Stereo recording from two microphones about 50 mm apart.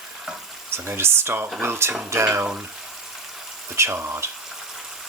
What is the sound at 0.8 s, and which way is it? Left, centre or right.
Speech, right.